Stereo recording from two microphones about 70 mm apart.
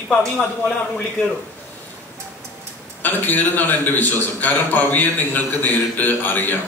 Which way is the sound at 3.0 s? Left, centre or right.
Left.